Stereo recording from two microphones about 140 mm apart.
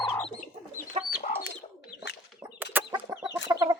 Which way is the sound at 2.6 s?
15° right (ahead or behind).